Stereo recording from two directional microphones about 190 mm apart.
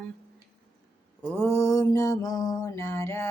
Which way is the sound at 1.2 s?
10° left (ahead or behind).